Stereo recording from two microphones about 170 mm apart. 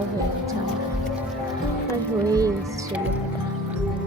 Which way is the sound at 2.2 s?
20° right (ahead or behind).